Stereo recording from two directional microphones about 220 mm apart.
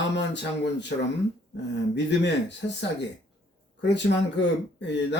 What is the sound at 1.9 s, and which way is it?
Speech, 50° left (ahead or behind).